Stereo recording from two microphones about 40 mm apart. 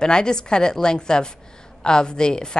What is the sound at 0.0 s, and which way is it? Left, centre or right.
A woman's voice, centre.